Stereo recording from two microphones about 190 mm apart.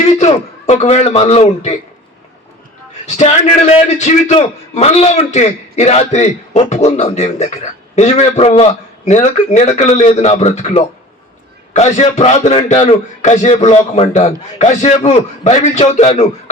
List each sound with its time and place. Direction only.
0.0 s a man's voice: 35° left (ahead or behind)
3.2 s a man's voice: 35° left (ahead or behind)